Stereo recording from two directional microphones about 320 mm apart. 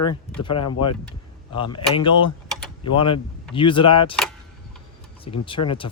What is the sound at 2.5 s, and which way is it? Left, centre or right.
Typing, centre.